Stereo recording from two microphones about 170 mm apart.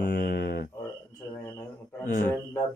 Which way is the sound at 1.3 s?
15° left (ahead or behind).